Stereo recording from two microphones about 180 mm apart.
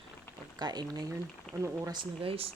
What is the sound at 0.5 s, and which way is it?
Speech, 20° right (ahead or behind).